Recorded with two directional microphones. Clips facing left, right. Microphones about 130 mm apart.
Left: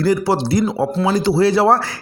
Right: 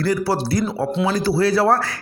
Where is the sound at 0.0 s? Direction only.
25° left (ahead or behind).